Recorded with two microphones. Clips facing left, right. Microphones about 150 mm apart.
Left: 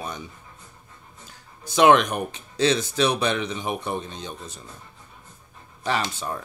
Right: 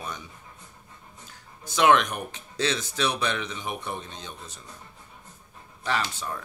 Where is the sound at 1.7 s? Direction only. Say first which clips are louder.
Left 4 dB; 20° left (ahead or behind).